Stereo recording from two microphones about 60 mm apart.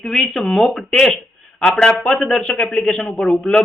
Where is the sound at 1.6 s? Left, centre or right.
Centre.